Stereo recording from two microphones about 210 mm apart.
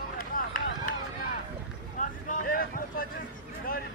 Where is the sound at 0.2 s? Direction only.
40° left (ahead or behind).